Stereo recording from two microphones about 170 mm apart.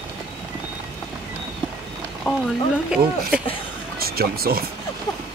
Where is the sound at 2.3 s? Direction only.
5° right (ahead or behind).